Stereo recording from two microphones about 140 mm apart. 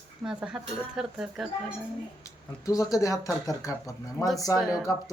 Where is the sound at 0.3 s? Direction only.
5° right (ahead or behind).